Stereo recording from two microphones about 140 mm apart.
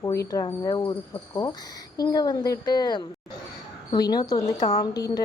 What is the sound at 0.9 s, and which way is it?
Cricket, 30° left (ahead or behind).